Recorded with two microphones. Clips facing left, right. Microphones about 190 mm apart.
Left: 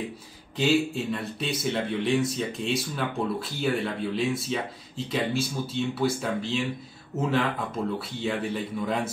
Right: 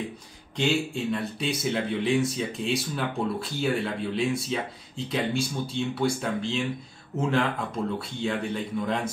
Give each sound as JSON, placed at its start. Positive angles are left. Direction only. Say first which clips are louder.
{"t": 0.6, "sound": "speech", "louder": "left 2 dB", "side_deg": 0}